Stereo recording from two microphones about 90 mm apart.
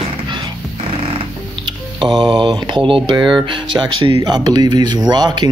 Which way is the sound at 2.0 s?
60° right (ahead or behind).